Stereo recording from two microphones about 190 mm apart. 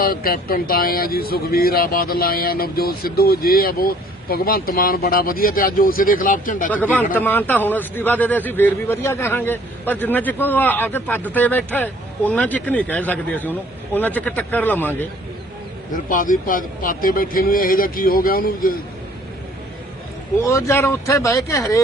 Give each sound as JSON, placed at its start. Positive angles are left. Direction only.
{"t": 0.0, "sound": "a man's voice", "side_deg": 50}
{"t": 6.7, "sound": "speech", "side_deg": 10}
{"t": 15.9, "sound": "a man's voice", "side_deg": 45}
{"t": 20.4, "sound": "speech", "side_deg": 15}